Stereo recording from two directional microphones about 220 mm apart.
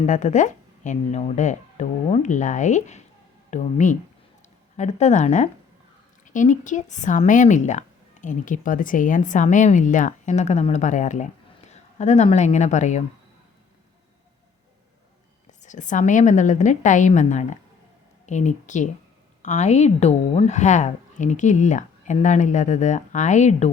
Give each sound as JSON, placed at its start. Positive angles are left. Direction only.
{"t": 0.0, "sound": "speech", "side_deg": 35}
{"t": 15.6, "sound": "speech", "side_deg": 35}